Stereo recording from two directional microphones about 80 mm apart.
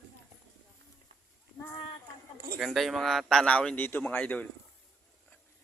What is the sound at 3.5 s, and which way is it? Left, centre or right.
A man's voice, centre.